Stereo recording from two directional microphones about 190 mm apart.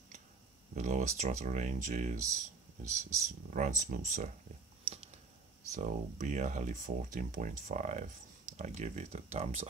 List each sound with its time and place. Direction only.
0.7 s speech: 40° right (ahead or behind)
4.8 s a sound: 30° right (ahead or behind)
5.8 s speech: 40° right (ahead or behind)